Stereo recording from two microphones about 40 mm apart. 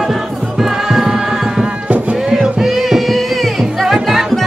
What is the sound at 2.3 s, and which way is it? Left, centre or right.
Music, centre.